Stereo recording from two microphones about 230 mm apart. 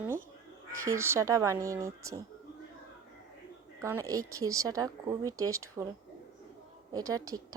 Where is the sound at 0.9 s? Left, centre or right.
Centre.